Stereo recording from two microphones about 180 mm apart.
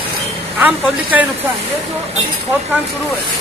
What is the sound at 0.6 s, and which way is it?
Speech, 10° right (ahead or behind).